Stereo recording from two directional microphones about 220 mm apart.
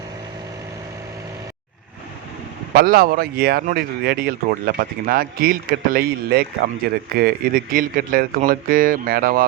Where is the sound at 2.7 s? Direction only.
40° right (ahead or behind).